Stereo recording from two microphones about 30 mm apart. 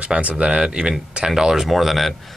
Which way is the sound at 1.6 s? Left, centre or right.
Centre.